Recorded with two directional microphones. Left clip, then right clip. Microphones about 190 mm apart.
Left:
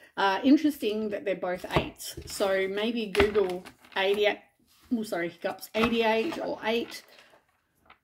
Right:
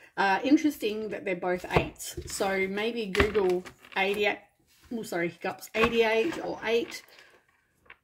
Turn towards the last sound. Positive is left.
turn(degrees=25)  # may be behind; listen again after turning